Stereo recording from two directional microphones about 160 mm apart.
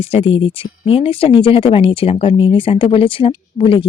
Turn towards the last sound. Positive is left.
turn(degrees=30)  # may be behind; listen again after turning